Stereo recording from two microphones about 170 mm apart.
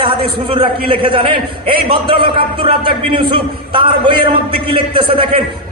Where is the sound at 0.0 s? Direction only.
30° right (ahead or behind).